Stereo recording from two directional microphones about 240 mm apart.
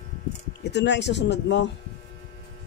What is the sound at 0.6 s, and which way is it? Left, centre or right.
Speech, left.